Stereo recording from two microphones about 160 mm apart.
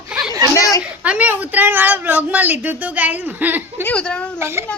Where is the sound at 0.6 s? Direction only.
20° left (ahead or behind).